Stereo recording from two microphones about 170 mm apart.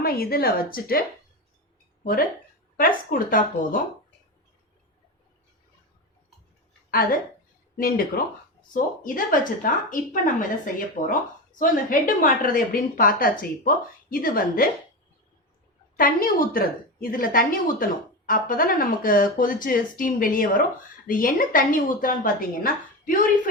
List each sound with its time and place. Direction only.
0.0 s speech: 60° left (ahead or behind)
2.7 s speech: 55° left (ahead or behind)
6.9 s a woman's voice: 55° left (ahead or behind)
16.0 s speech: 55° left (ahead or behind)